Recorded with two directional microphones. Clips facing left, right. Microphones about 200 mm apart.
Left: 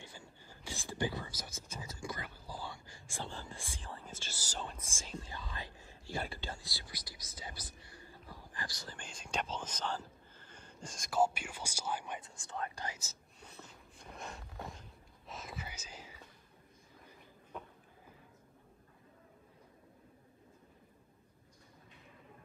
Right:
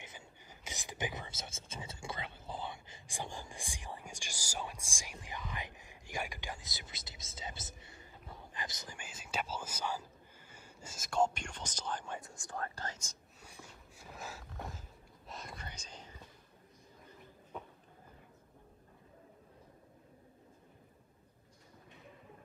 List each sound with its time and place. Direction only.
0.0 s speech: 20° right (ahead or behind)
8.9 s speech: 5° right (ahead or behind)
11.1 s speech: 5° left (ahead or behind)
12.2 s speech: 25° left (ahead or behind); by 13.2 s 5° left (ahead or behind)
13.4 s a sound: 10° right (ahead or behind); by 16.2 s 5° left (ahead or behind)